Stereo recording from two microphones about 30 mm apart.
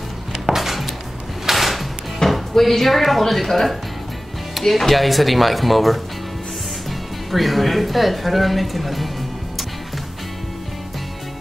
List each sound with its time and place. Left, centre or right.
0.6 s dishes: centre
1.5 s music: centre
2.2 s music: centre
2.7 s speech: centre
7.2 s speech: centre